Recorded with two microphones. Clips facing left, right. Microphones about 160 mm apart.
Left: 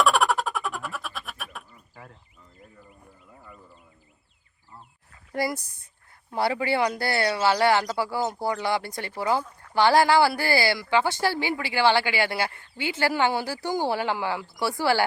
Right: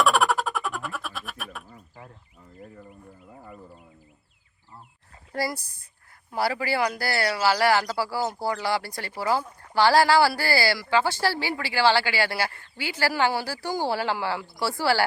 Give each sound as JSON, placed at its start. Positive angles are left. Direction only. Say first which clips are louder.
{"t": 0.0, "sound": "frog", "louder": "even", "side_deg": 0}
{"t": 5.3, "sound": "speech", "louder": "left 1 dB", "side_deg": 20}